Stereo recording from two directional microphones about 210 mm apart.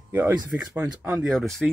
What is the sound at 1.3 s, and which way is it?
Speech, centre (ahead or behind).